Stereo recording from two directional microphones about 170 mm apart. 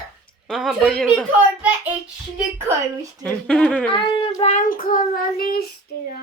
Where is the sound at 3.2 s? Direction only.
5° left (ahead or behind).